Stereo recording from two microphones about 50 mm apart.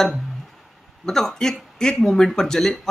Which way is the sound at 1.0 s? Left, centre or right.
Centre.